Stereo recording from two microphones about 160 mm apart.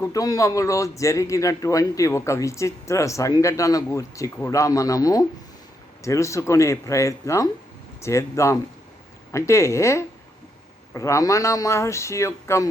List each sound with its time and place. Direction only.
0.0 s speech: 20° left (ahead or behind)